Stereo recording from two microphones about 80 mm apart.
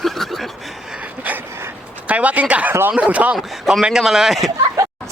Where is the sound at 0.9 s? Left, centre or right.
Centre.